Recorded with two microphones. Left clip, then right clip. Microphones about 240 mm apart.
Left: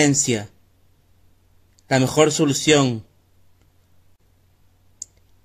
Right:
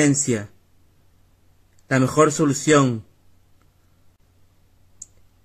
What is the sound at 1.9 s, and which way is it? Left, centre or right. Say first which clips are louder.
Speech: even; centre.